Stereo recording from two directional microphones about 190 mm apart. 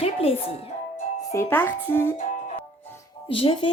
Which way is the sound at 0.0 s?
30° left (ahead or behind).